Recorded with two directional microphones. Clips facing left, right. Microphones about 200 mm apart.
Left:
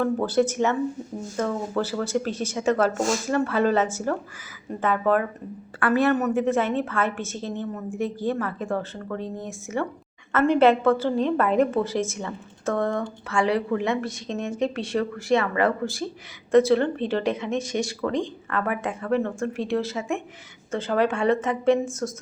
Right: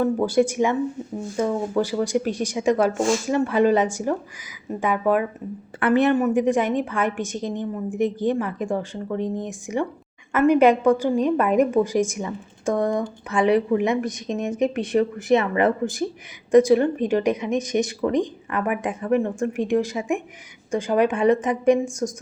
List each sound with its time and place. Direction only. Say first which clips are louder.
0.0 s a woman's voice: right 2 dB; 10° right (ahead or behind)